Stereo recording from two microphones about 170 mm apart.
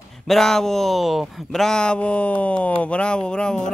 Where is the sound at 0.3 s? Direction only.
Centre (ahead or behind).